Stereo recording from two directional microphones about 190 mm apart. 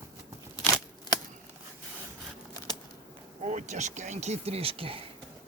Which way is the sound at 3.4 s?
40° right (ahead or behind).